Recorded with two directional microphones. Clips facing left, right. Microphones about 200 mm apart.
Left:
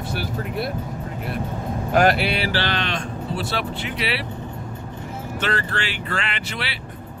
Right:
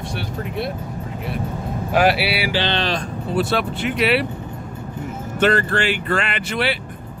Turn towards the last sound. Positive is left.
turn(degrees=-50)  # may be behind; listen again after turning